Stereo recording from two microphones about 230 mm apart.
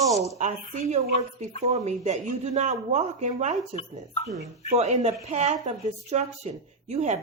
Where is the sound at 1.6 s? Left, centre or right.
Right.